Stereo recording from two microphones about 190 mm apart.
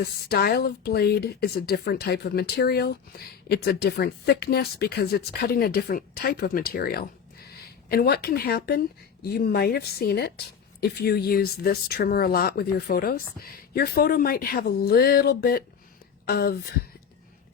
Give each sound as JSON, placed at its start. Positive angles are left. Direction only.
{"t": 0.0, "sound": "a woman's voice", "side_deg": 55}